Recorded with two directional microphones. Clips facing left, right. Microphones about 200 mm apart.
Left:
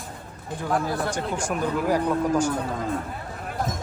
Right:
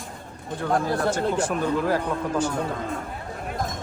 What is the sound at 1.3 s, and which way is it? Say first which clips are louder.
Speech: right 2 dB; 15° left (ahead or behind).